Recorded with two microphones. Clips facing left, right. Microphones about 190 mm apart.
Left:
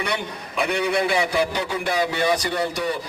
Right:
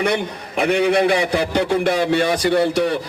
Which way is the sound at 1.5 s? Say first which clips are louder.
Right 8 dB; 55° right (ahead or behind).